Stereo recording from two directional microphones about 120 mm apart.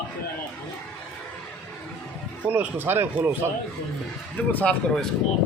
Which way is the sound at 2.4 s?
15° right (ahead or behind).